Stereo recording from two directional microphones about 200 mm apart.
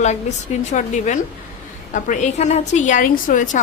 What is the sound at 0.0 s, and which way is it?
A woman's voice, 35° left (ahead or behind).